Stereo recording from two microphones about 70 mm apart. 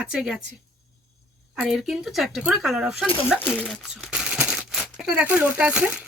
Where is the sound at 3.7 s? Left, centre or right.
Centre.